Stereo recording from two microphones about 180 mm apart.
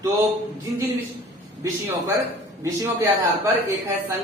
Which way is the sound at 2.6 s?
15° right (ahead or behind).